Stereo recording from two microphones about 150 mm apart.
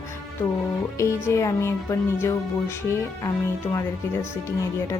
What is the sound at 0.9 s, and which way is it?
A woman's voice, 20° left (ahead or behind).